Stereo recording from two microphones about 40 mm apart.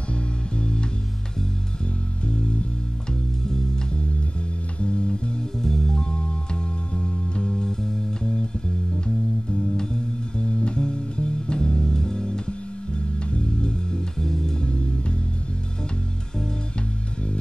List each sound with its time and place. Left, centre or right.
0.1 s music: left
3.1 s music: centre
4.7 s music: left
5.6 s music: centre
10.3 s music: left
14.6 s music: left